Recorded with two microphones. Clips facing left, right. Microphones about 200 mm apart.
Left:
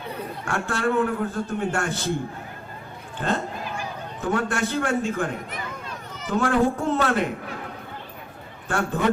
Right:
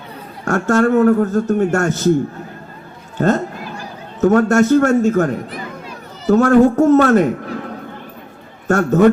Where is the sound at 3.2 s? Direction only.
45° right (ahead or behind).